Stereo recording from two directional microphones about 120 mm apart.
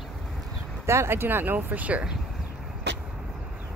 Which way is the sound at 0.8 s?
20° right (ahead or behind).